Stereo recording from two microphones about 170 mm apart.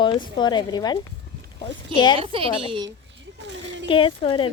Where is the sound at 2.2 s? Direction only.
30° right (ahead or behind).